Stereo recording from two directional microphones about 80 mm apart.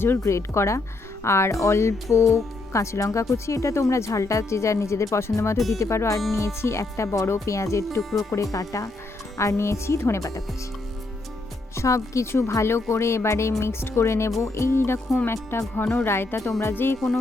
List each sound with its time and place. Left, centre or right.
0.2 s speech: left
5.5 s speech: centre
5.8 s speech: left
11.7 s speech: left